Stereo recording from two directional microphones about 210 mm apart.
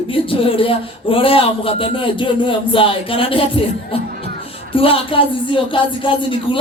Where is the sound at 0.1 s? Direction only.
25° left (ahead or behind).